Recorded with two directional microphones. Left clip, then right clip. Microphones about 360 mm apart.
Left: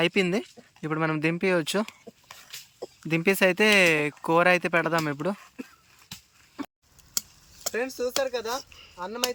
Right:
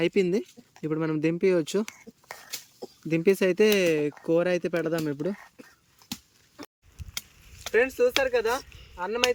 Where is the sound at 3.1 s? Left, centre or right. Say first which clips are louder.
Left 1 dB; centre.